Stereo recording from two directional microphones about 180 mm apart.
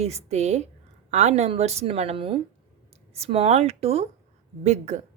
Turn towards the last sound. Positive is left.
turn(degrees=-40)  # may be behind; listen again after turning